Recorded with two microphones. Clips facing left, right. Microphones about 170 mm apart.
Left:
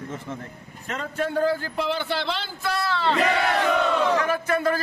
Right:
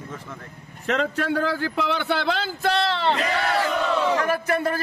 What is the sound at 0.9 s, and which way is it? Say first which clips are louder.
A man's voice: right 5 dB; 90° right.